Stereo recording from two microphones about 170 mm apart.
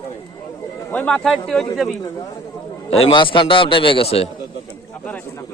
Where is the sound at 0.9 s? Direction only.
5° left (ahead or behind).